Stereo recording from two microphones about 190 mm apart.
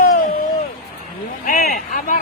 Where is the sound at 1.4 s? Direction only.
45° left (ahead or behind).